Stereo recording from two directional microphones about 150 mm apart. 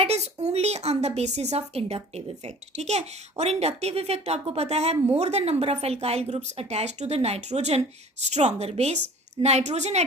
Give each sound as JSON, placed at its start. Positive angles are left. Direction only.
{"t": 0.0, "sound": "a woman's voice", "side_deg": -45}